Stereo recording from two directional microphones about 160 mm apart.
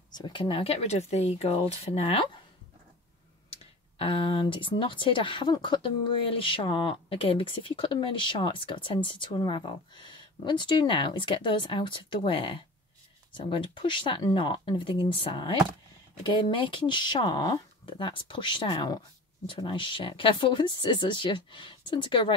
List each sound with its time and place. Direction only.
0.1 s speech: 30° left (ahead or behind)
4.0 s speech: 30° left (ahead or behind)